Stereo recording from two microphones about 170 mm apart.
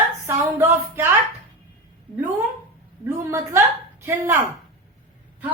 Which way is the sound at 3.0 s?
15° right (ahead or behind).